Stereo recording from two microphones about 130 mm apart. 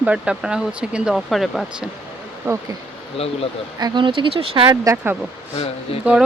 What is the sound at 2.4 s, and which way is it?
Speech, 20° right (ahead or behind).